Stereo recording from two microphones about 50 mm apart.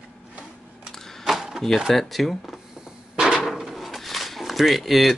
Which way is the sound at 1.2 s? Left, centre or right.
Centre.